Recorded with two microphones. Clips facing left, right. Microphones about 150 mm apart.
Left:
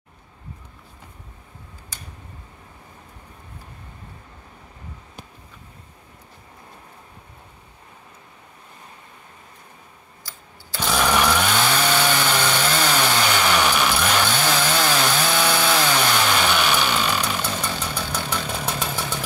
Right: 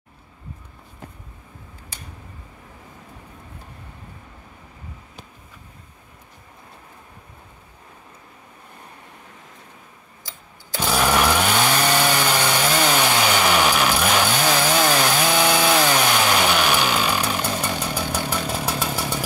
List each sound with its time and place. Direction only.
10.2 s sewing machine: 15° right (ahead or behind)
10.9 s chainsaw: 10° right (ahead or behind)